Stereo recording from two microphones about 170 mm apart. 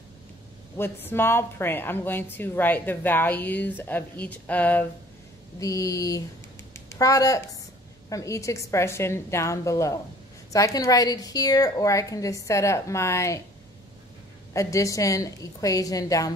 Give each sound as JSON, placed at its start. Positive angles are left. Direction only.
{"t": 0.7, "sound": "a woman's voice", "side_deg": 15}
{"t": 5.6, "sound": "a woman's voice", "side_deg": 20}
{"t": 14.5, "sound": "a woman's voice", "side_deg": 20}